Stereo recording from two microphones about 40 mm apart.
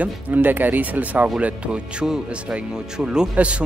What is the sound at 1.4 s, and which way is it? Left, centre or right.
Speech, right.